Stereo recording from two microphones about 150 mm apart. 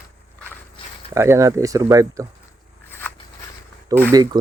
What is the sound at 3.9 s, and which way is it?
Speech, 25° right (ahead or behind).